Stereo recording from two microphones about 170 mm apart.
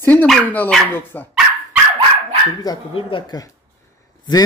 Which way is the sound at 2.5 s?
30° left (ahead or behind).